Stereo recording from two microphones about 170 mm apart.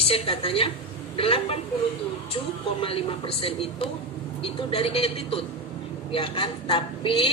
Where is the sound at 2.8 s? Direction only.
30° left (ahead or behind).